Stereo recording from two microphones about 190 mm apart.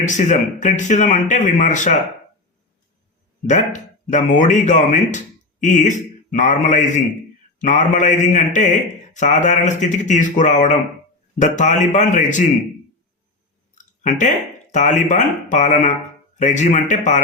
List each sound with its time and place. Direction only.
0.0 s speech: 40° left (ahead or behind)
4.1 s a man's voice: 40° left (ahead or behind)
13.7 s speech: 40° left (ahead or behind)